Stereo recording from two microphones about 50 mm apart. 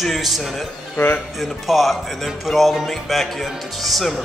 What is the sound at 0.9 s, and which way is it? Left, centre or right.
Speech, left.